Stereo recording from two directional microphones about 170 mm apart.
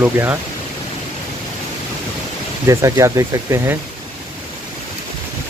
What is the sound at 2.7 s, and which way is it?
Speech, 15° right (ahead or behind).